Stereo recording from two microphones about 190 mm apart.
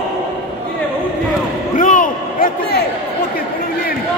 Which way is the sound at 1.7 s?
45° left (ahead or behind).